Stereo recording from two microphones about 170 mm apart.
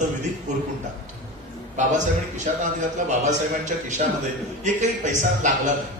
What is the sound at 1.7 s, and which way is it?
A man's voice, 45° right (ahead or behind).